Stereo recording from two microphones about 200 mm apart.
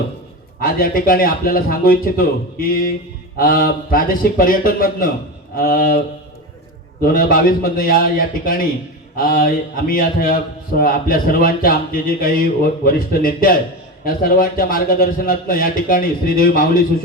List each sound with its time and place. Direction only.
0.6 s a man's voice: 45° left (ahead or behind)
7.0 s a man's voice: 45° left (ahead or behind)